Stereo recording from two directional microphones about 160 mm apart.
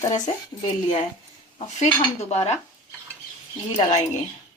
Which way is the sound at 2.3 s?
45° left (ahead or behind).